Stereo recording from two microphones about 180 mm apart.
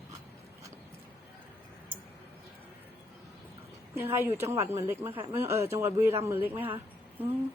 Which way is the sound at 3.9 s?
15° right (ahead or behind).